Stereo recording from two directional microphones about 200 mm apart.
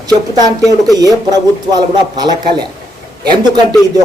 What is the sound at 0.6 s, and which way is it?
Speech, 20° right (ahead or behind).